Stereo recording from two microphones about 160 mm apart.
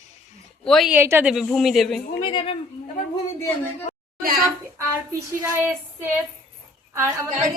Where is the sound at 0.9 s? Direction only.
15° right (ahead or behind).